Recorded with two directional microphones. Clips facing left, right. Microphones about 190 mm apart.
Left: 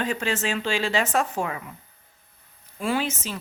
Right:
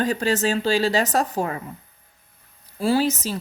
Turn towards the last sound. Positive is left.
turn(degrees=-35)  # may be behind; listen again after turning